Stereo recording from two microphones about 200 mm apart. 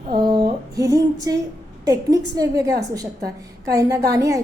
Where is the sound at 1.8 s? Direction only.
15° right (ahead or behind).